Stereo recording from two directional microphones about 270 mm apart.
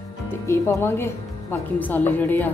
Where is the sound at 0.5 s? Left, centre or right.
Centre.